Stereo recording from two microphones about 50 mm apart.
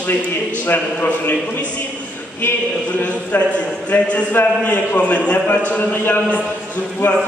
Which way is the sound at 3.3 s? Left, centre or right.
Left.